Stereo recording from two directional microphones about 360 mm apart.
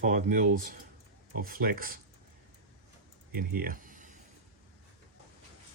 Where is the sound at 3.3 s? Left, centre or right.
Right.